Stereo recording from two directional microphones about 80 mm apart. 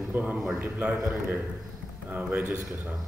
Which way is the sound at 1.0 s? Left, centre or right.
Right.